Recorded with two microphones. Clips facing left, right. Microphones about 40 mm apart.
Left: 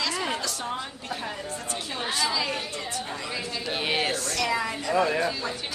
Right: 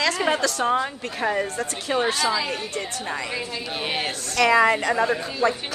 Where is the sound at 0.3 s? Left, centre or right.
Right.